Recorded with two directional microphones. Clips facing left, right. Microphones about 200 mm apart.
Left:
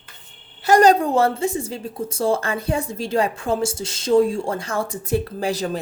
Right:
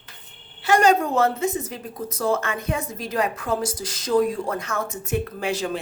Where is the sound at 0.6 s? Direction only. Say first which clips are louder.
Left 4 dB; 40° left (ahead or behind).